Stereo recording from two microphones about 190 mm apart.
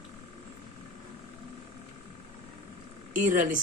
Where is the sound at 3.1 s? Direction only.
40° right (ahead or behind).